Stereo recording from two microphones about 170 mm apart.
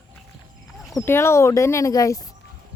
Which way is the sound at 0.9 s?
15° left (ahead or behind).